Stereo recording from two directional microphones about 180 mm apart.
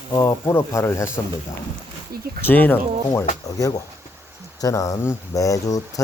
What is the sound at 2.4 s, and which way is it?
Speech, 10° left (ahead or behind).